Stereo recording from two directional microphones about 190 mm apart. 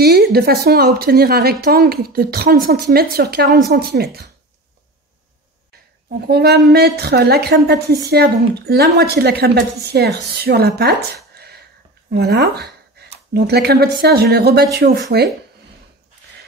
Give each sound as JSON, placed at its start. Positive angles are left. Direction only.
{"t": 0.0, "sound": "a woman's voice", "side_deg": -55}
{"t": 6.2, "sound": "a woman's voice", "side_deg": -55}
{"t": 11.3, "sound": "sneeze", "side_deg": -60}
{"t": 12.1, "sound": "a woman's voice", "side_deg": -60}
{"t": 13.0, "sound": "a sound", "side_deg": -60}
{"t": 13.3, "sound": "a woman's voice", "side_deg": -60}